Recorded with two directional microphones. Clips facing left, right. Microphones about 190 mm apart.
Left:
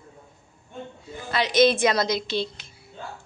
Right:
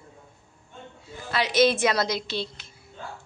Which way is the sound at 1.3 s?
5° right (ahead or behind).